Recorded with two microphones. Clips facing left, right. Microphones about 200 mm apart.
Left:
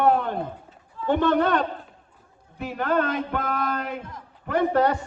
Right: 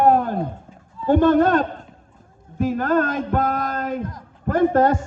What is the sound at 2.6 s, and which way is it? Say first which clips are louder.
Speech: right 5 dB; 45° right (ahead or behind).